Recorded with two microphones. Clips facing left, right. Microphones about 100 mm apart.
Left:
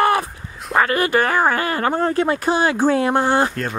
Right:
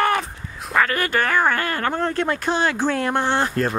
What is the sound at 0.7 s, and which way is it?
Speech, 20° left (ahead or behind).